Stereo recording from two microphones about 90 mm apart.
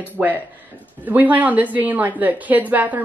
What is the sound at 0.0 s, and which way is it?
A woman's voice, 20° right (ahead or behind).